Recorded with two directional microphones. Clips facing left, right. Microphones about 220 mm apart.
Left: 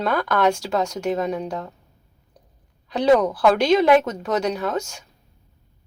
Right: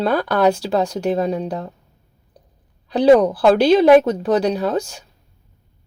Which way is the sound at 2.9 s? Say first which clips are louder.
Right 5 dB; 35° right (ahead or behind).